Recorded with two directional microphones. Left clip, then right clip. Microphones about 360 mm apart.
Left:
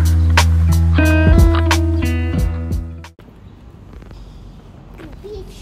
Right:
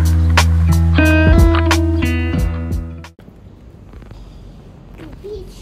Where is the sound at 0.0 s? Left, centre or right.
Centre.